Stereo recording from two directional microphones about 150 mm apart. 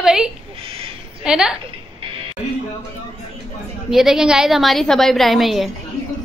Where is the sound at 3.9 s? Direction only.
5° right (ahead or behind).